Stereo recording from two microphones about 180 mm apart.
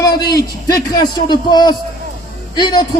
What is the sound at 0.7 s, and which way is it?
A man's voice, 25° left (ahead or behind).